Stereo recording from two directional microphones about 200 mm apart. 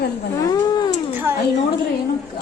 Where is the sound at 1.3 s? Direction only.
10° right (ahead or behind).